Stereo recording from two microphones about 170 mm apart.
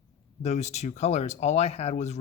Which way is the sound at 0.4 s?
40° left (ahead or behind).